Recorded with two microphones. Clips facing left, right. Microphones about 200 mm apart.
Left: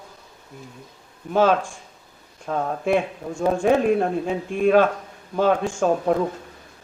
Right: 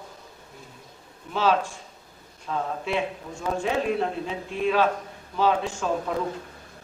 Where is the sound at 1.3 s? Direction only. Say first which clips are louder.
Left 5 dB; 50° left (ahead or behind).